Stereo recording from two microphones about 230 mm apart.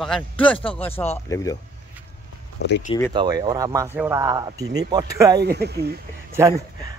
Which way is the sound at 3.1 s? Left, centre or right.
Centre.